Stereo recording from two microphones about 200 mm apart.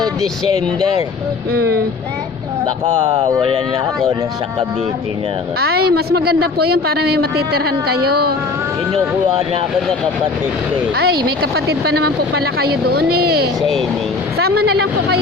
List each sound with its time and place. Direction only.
1.5 s a woman's voice: 50° right (ahead or behind)
3.0 s speech: 35° right (ahead or behind)
5.5 s a woman's voice: 50° right (ahead or behind)
10.9 s a woman's voice: 50° right (ahead or behind)
13.6 s speech: centre (ahead or behind)
14.3 s a woman's voice: 50° right (ahead or behind)